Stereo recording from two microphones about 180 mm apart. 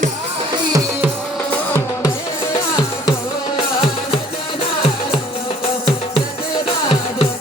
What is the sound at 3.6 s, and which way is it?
Music, 30° left (ahead or behind).